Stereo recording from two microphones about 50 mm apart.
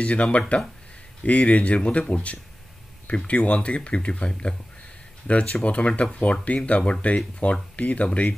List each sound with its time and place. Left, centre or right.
0.0 s speech: left